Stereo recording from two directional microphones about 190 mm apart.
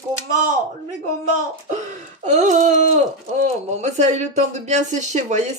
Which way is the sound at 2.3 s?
40° right (ahead or behind).